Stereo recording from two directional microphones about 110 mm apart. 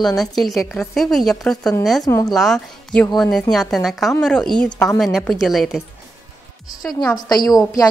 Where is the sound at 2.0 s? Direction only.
35° left (ahead or behind).